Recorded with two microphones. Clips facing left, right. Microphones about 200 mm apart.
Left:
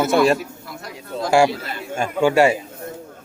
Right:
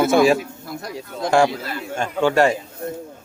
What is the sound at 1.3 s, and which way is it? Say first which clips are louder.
A man's voice: left 1 dB; 10° left (ahead or behind).